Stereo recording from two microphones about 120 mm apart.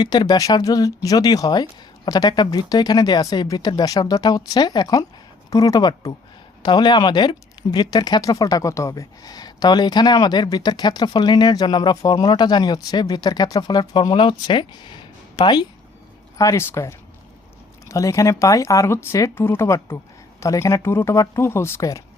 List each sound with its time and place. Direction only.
0.0 s speech: 35° left (ahead or behind)
16.4 s speech: 25° left (ahead or behind)